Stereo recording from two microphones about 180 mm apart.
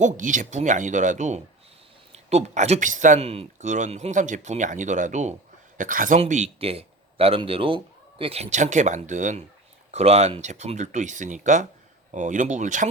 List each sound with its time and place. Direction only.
0.0 s a man's voice: 45° right (ahead or behind)